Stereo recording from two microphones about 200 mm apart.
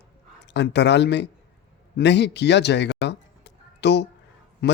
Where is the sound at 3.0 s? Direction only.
60° left (ahead or behind).